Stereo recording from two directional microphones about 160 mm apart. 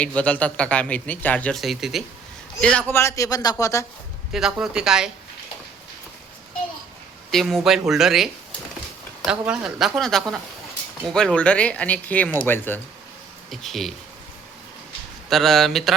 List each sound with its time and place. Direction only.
0.0 s speech: 10° left (ahead or behind)
4.3 s speech: centre (ahead or behind)
7.3 s speech: centre (ahead or behind)
13.5 s speech: centre (ahead or behind)
15.3 s speech: centre (ahead or behind)